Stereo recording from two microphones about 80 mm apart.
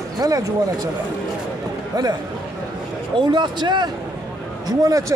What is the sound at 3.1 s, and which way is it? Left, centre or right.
Speech, right.